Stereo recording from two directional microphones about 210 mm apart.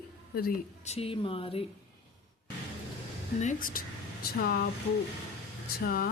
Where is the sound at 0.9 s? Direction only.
30° left (ahead or behind).